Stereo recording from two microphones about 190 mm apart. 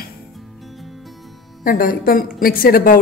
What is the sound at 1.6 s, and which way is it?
A woman's voice, 45° left (ahead or behind).